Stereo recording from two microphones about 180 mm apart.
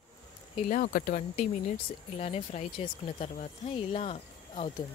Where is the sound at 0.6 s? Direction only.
50° left (ahead or behind).